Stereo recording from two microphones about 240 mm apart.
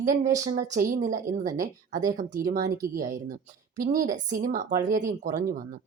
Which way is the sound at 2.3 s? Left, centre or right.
Centre.